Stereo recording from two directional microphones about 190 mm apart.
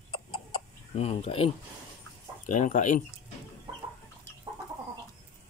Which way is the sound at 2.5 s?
40° left (ahead or behind).